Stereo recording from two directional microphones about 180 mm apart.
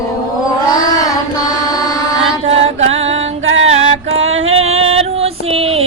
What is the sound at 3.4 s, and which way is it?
Music, 90° right.